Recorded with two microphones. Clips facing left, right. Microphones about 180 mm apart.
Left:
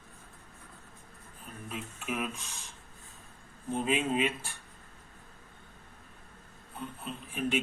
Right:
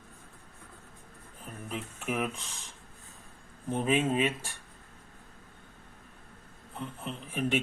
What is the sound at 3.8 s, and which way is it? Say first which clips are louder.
Speech: right 2 dB; 45° right (ahead or behind).